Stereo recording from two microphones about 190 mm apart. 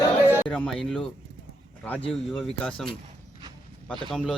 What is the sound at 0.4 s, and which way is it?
Speech, 5° left (ahead or behind).